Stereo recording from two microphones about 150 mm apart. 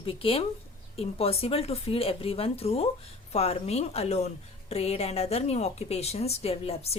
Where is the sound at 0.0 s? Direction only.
35° left (ahead or behind).